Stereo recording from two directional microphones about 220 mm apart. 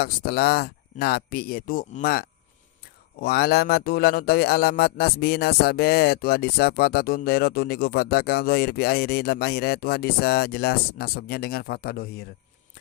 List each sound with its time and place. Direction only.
0.0 s a man's voice: 45° left (ahead or behind)